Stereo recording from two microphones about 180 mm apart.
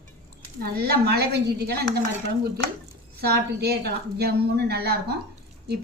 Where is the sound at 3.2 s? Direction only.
60° right (ahead or behind).